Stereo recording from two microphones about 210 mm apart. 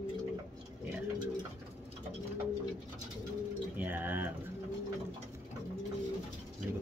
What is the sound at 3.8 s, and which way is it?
Bird, 10° right (ahead or behind).